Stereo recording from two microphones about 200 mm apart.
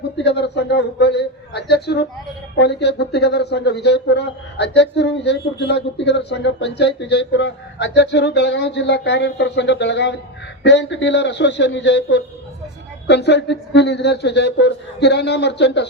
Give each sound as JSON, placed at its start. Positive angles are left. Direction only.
{"t": 0.2, "sound": "a man's voice", "side_deg": 60}